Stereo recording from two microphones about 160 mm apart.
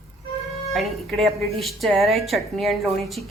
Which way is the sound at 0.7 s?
Centre (ahead or behind).